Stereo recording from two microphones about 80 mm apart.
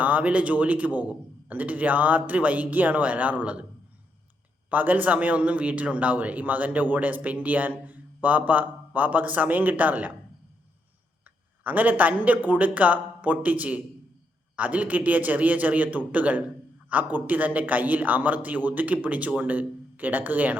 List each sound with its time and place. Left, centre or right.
0.0 s a man's voice: centre
4.7 s a man's voice: right
11.6 s a man's voice: right